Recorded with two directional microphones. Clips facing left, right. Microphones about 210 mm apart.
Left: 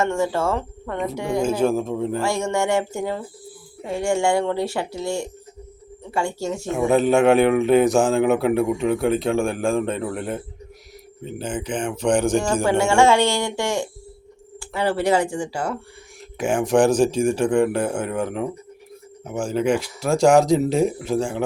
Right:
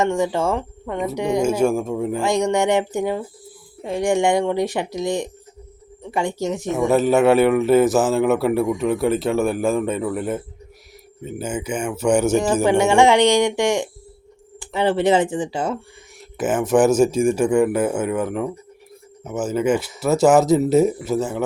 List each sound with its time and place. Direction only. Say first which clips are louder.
0.0 s speech: right 2 dB; 15° right (ahead or behind)
6.7 s speech: even; 5° right (ahead or behind)
12.6 s speech: right 2 dB; 15° right (ahead or behind)
16.4 s speech: right 1 dB; 5° right (ahead or behind)